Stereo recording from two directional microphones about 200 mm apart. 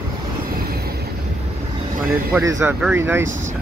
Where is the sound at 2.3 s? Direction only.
15° right (ahead or behind).